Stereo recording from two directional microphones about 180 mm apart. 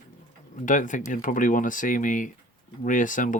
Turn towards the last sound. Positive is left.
turn(degrees=45)  # may be behind; listen again after turning